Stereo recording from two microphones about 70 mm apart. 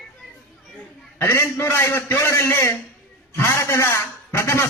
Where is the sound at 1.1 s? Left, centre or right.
Left.